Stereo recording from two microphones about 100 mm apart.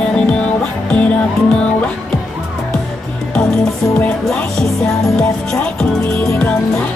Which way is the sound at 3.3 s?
5° left (ahead or behind).